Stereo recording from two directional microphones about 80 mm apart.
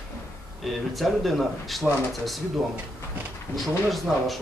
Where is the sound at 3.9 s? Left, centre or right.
Centre.